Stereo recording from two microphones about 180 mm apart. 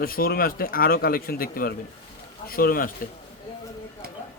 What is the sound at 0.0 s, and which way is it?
Speech, 55° left (ahead or behind).